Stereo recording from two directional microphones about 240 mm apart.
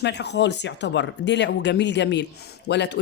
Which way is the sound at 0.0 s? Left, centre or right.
Left.